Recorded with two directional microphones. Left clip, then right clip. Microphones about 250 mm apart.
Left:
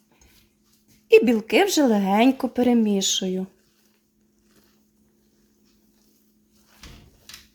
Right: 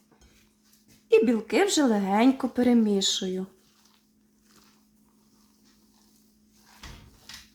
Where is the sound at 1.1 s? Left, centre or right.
Left.